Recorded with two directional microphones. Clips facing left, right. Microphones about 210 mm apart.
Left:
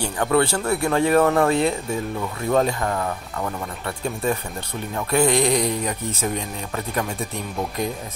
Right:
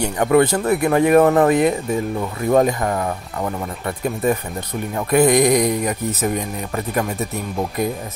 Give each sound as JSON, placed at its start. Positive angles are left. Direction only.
{"t": 0.0, "sound": "speech", "side_deg": -20}